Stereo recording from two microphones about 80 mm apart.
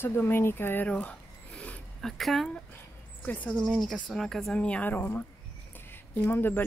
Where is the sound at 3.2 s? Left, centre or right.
Centre.